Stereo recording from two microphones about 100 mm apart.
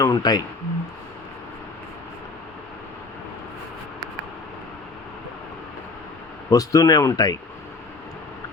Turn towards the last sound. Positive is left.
turn(degrees=40)  # may be behind; listen again after turning